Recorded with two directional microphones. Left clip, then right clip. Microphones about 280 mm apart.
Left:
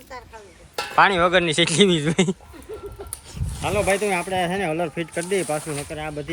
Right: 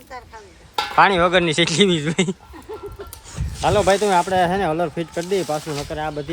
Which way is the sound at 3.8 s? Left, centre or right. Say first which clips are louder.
Right 4 dB; centre.